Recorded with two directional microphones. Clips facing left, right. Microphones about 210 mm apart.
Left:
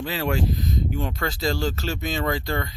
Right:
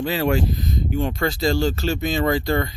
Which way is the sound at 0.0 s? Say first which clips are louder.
Right 5 dB; centre (ahead or behind).